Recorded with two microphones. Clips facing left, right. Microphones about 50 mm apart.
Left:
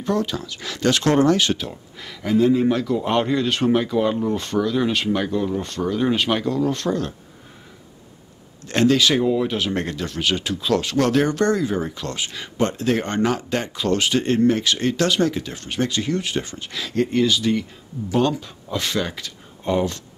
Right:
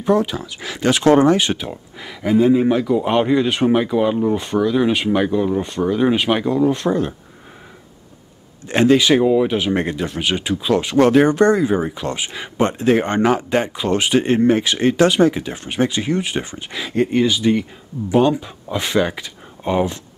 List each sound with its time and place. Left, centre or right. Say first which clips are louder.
0.0 s speech: right 5 dB; centre
8.6 s speech: right 4 dB; centre